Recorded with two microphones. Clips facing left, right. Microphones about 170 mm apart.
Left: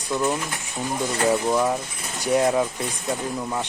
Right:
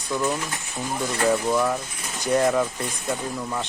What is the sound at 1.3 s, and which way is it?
Speech, 15° left (ahead or behind).